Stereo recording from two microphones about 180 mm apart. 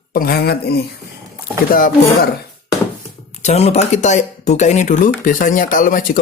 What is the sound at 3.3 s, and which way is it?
Speech, 40° left (ahead or behind).